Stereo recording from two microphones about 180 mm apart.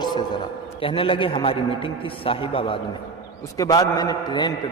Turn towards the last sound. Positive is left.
turn(degrees=25)  # may be behind; listen again after turning